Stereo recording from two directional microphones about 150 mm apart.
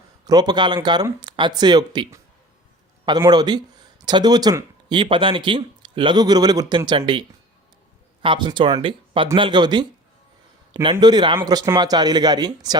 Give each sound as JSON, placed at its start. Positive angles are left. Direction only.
{"t": 0.3, "sound": "speech", "side_deg": -30}
{"t": 11.0, "sound": "speech", "side_deg": -30}